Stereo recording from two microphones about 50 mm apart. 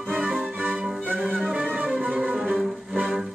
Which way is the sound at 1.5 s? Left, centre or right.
Right.